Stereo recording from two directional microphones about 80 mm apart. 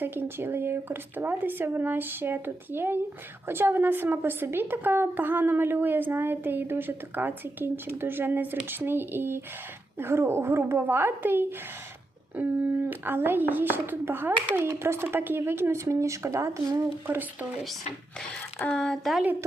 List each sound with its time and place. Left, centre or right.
0.0 s a woman's voice: right
12.8 s a woman's voice: right
18.6 s speech: centre